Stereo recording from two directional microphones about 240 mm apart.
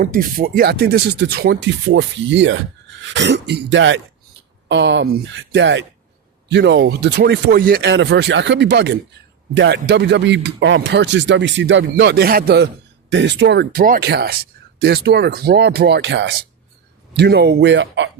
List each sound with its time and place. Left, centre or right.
0.0 s speech: right